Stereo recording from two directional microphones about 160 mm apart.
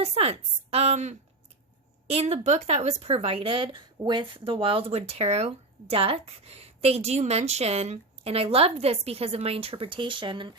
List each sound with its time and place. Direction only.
0.0 s speech: 40° right (ahead or behind)